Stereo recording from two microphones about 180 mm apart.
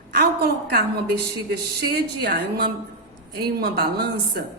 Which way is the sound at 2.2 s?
60° right (ahead or behind).